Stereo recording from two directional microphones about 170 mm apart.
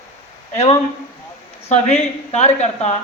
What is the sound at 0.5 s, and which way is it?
A woman's voice, 40° left (ahead or behind).